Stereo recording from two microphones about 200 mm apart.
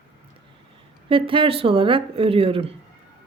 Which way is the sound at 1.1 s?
25° right (ahead or behind).